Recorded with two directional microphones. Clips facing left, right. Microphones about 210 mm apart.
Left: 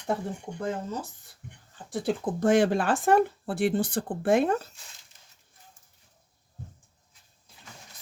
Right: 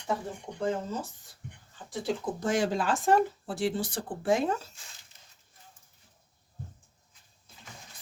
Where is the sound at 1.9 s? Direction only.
55° left (ahead or behind).